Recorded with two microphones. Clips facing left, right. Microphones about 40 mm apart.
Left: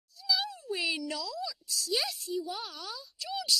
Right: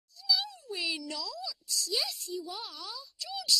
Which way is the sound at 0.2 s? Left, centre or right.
Centre.